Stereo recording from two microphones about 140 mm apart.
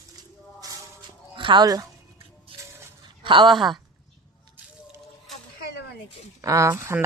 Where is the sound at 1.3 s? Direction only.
35° right (ahead or behind).